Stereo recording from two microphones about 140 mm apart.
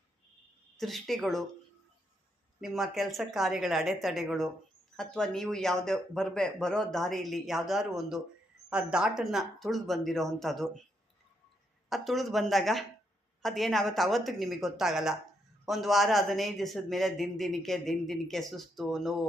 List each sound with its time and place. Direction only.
0.8 s a man's voice: centre (ahead or behind)
2.6 s a man's voice: centre (ahead or behind)
11.9 s a man's voice: centre (ahead or behind)